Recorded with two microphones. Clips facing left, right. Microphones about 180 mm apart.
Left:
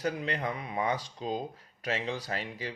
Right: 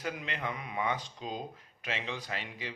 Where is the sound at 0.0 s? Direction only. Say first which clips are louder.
Left 5 dB; 40° left (ahead or behind).